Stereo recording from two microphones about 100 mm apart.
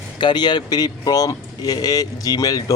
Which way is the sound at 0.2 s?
50° left (ahead or behind).